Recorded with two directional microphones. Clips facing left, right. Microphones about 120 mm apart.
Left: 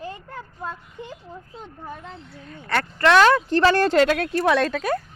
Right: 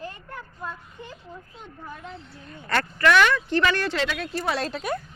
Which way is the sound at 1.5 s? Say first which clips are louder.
Left 4 dB; 30° left (ahead or behind).